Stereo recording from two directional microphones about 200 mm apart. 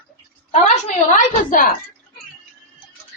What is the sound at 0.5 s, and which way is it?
A woman's voice, 35° left (ahead or behind).